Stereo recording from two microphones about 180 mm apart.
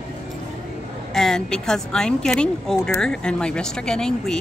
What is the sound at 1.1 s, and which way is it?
A woman's voice, 5° left (ahead or behind).